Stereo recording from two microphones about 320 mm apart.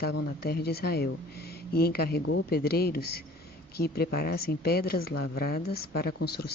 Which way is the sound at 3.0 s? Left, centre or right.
Left.